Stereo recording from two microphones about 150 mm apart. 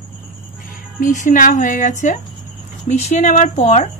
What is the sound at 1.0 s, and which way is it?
Speech, 60° left (ahead or behind).